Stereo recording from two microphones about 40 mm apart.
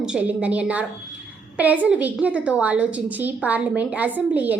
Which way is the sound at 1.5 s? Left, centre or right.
Right.